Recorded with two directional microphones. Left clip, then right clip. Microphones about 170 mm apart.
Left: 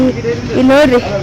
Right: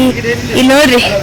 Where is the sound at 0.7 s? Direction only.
10° right (ahead or behind).